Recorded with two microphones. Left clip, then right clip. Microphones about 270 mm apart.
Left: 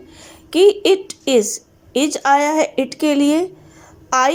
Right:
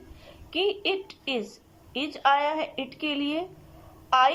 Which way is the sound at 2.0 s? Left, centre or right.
Left.